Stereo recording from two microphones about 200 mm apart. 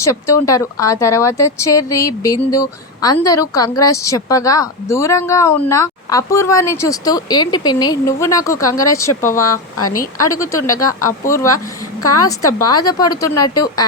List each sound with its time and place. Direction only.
0.0 s speech: 15° left (ahead or behind)
9.7 s a woman's voice: 90° left
10.2 s speech: 15° left (ahead or behind)
12.5 s speech: 20° left (ahead or behind)